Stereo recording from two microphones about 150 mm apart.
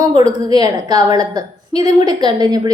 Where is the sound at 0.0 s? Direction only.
25° right (ahead or behind).